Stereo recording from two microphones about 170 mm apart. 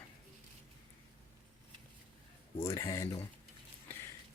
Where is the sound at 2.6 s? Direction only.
20° left (ahead or behind).